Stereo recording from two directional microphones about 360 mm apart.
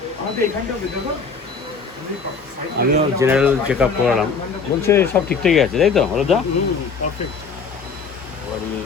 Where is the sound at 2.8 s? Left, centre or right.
Right.